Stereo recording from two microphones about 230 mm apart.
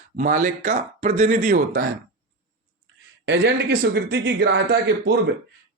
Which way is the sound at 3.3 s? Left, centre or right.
Right.